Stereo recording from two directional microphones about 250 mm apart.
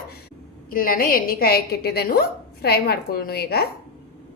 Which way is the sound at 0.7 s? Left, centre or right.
Left.